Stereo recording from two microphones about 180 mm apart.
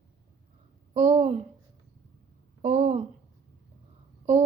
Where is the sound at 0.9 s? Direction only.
40° right (ahead or behind).